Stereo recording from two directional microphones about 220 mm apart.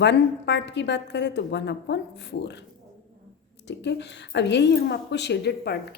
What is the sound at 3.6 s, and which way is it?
A woman's voice, 50° left (ahead or behind).